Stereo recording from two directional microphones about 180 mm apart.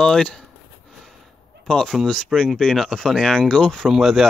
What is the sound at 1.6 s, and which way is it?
Speech, 5° left (ahead or behind).